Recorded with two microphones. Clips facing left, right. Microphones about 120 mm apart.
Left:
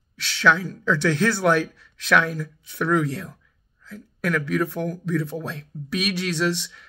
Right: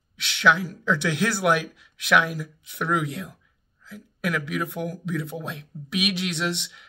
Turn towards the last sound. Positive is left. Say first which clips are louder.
# left 4 dB
turn(degrees=-20)  # may be behind; listen again after turning